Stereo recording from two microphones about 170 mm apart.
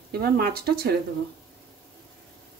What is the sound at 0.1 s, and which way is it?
Speech, 65° right (ahead or behind).